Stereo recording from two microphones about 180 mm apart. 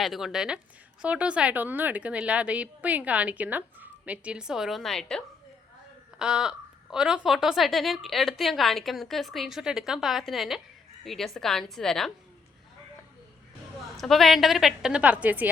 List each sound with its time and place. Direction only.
0.0 s a woman's voice: centre (ahead or behind)
13.9 s a woman's voice: centre (ahead or behind)